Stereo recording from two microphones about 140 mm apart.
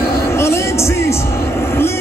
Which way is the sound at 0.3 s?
20° left (ahead or behind).